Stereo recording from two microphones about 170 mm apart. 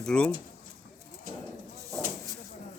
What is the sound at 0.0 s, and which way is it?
Speech, 5° left (ahead or behind).